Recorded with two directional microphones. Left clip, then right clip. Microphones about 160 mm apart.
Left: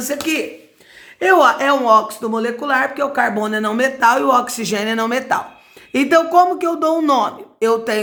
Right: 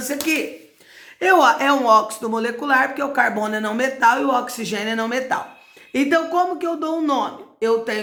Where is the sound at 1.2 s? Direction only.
10° left (ahead or behind).